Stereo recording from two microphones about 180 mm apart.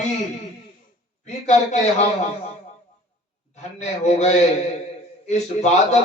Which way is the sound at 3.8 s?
40° left (ahead or behind).